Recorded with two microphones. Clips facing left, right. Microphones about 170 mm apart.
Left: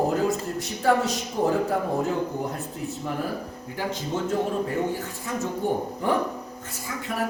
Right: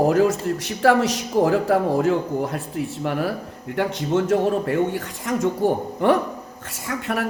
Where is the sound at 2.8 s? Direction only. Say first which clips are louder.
Right 7 dB; 70° right (ahead or behind); by 5.5 s 90° right.